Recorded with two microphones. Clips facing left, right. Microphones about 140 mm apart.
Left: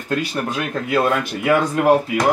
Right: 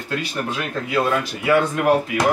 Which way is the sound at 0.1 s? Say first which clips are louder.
Left 4 dB; 45° left (ahead or behind).